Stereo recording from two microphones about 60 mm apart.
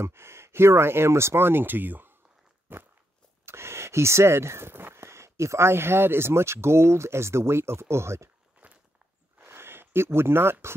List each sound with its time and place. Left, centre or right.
0.0 s speech: right
2.7 s walk: right
3.4 s speech: right
8.6 s walk: right
9.5 s speech: right